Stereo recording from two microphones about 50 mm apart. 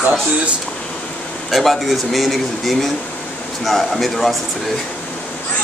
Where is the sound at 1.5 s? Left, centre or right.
Centre.